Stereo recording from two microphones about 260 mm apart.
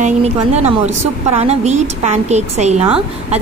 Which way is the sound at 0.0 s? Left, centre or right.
Right.